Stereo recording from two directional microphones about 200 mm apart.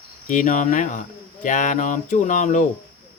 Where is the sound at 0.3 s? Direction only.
40° left (ahead or behind).